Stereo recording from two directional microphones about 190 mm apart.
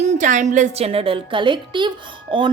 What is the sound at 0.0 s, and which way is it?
A woman's voice, 40° right (ahead or behind).